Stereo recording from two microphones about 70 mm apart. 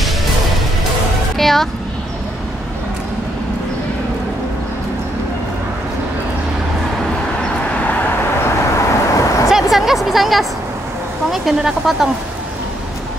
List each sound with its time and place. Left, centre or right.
1.4 s speech: centre
8.7 s vehicle: left
9.5 s a sound: centre
11.2 s speech: centre